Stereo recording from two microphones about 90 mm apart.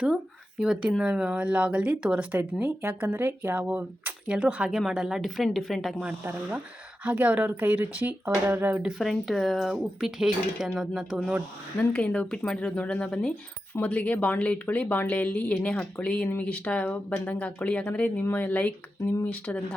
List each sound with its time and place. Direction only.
0.6 s speech: 10° right (ahead or behind); by 3.7 s 25° right (ahead or behind)
3.7 s speech: 15° right (ahead or behind); by 6.0 s centre (ahead or behind)
7.0 s speech: 15° right (ahead or behind)
9.0 s speech: centre (ahead or behind)
11.9 s a woman's voice: 10° left (ahead or behind)